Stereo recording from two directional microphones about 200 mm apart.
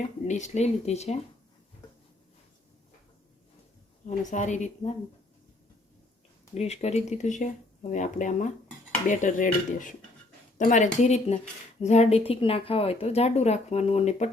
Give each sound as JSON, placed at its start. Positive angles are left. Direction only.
{"t": 0.3, "sound": "speech", "side_deg": 35}
{"t": 4.3, "sound": "speech", "side_deg": 35}
{"t": 6.5, "sound": "speech", "side_deg": 35}